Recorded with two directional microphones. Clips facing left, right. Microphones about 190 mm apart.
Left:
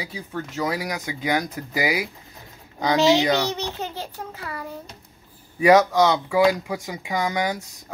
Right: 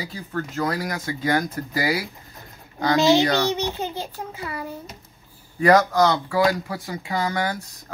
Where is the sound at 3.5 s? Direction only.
15° right (ahead or behind).